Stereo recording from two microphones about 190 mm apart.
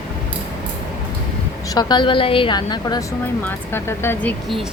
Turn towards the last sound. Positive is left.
turn(degrees=5)  # may be behind; listen again after turning